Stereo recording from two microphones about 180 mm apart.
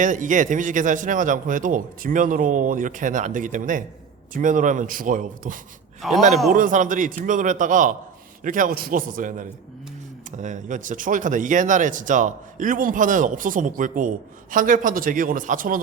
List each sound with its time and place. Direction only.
0.0 s a man's voice: 45° right (ahead or behind)
6.0 s speech: centre (ahead or behind)
6.5 s a man's voice: 45° right (ahead or behind)